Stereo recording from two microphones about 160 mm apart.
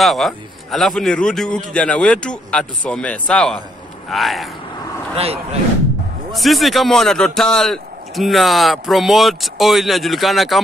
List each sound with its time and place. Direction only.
0.0 s a man's voice: centre (ahead or behind)
5.1 s speech: 40° right (ahead or behind)
6.3 s a man's voice: centre (ahead or behind)